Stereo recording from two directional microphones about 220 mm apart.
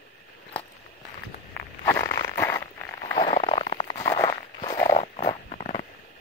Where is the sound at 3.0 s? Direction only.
20° left (ahead or behind).